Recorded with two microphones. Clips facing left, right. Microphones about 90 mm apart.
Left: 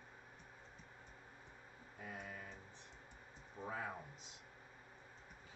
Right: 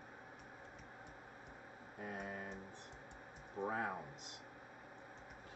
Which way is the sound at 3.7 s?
40° right (ahead or behind).